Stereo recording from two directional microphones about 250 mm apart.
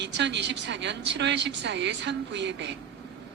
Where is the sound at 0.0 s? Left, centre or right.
Right.